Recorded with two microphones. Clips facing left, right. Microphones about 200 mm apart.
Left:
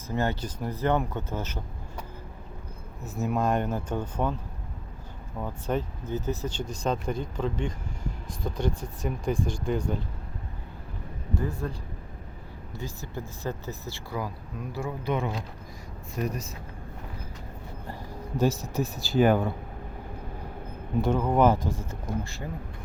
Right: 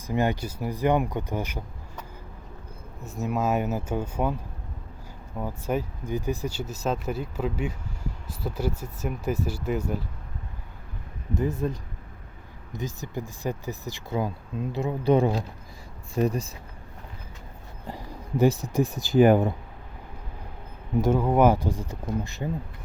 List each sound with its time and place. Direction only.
0.1 s speech: 15° right (ahead or behind)
3.0 s speech: centre (ahead or behind)
5.4 s speech: 10° right (ahead or behind)
11.3 s speech: 20° right (ahead or behind)
15.1 s speech: 35° right (ahead or behind)
17.8 s speech: 15° right (ahead or behind)
21.0 s speech: 10° right (ahead or behind)